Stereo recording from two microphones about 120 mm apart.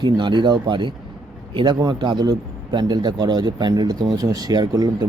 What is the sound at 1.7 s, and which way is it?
Speech, 35° right (ahead or behind).